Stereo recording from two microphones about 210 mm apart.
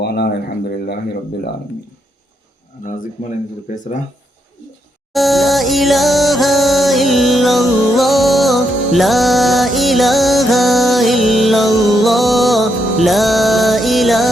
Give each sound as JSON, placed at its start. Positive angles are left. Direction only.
{"t": 0.0, "sound": "speech", "side_deg": 50}
{"t": 2.8, "sound": "speech", "side_deg": 40}
{"t": 5.1, "sound": "music", "side_deg": 0}